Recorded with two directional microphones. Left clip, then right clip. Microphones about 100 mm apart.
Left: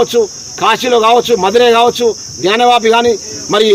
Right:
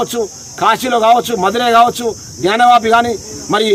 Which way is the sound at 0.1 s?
25° right (ahead or behind).